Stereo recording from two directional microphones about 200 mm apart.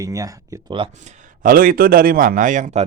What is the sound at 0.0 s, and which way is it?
Speech, 15° right (ahead or behind).